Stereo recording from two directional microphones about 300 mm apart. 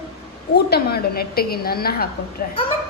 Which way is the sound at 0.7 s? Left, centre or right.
Left.